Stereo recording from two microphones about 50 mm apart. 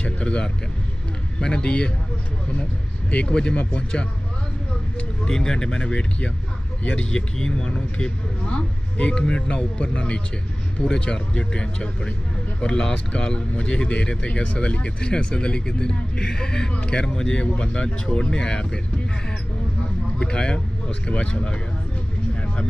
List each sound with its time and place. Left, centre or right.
0.0 s vehicle: left
1.4 s speech: centre
3.3 s speech: centre
5.2 s speech: centre
20.2 s speech: centre